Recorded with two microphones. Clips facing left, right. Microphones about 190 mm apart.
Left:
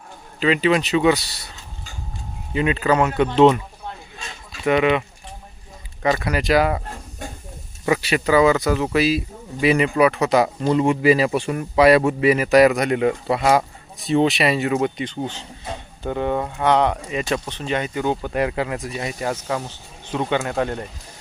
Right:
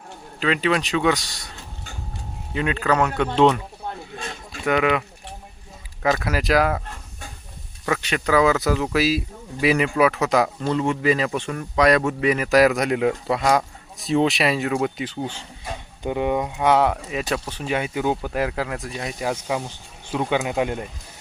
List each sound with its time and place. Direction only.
0.3 s speech: centre (ahead or behind)
2.5 s speech: 5° left (ahead or behind)
4.2 s a sound: 50° right (ahead or behind)
4.6 s speech: centre (ahead or behind)
7.9 s speech: 10° left (ahead or behind)
10.7 s speech: 10° left (ahead or behind); by 20.8 s 15° right (ahead or behind)